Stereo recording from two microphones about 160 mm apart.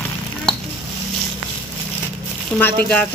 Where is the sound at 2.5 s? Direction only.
10° left (ahead or behind).